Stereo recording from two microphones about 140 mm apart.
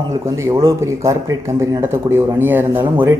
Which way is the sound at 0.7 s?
20° right (ahead or behind).